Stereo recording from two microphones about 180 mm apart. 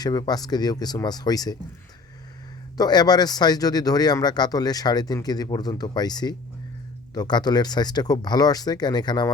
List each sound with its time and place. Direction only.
0.0 s speech: 20° left (ahead or behind)
2.7 s speech: 20° left (ahead or behind)